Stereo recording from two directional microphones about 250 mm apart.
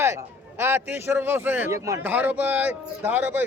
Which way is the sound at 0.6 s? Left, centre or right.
Centre.